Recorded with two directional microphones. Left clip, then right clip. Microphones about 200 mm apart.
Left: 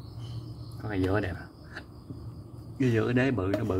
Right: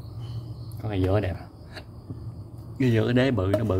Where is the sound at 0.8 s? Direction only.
15° right (ahead or behind).